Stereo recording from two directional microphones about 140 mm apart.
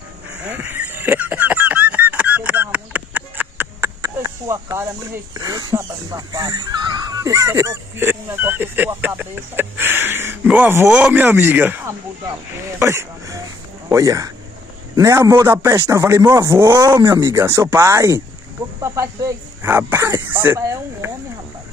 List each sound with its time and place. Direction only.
0.3 s a sound: 10° right (ahead or behind)
12.7 s a man's voice: 20° right (ahead or behind)
16.6 s speech: 30° right (ahead or behind)